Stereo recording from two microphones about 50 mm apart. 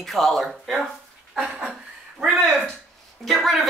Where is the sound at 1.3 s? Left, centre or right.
Centre.